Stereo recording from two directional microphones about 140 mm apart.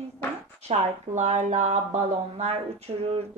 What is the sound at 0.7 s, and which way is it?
Speech, 55° right (ahead or behind).